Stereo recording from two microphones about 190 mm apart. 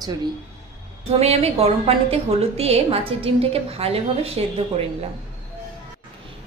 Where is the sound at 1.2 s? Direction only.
30° right (ahead or behind).